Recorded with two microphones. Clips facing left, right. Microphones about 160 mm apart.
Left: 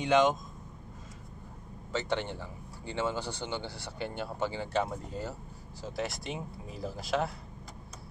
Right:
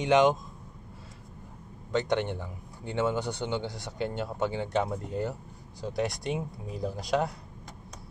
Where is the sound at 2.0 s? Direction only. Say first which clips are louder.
Right 4 dB; 15° right (ahead or behind).